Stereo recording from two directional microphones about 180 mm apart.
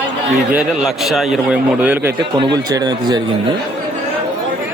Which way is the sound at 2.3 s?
20° right (ahead or behind).